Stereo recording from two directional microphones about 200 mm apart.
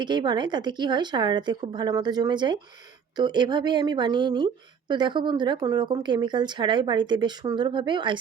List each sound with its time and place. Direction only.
0.0 s a woman's voice: 20° right (ahead or behind)